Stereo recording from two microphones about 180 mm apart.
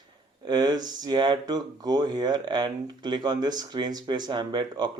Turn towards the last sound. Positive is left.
turn(degrees=-25)  # may be behind; listen again after turning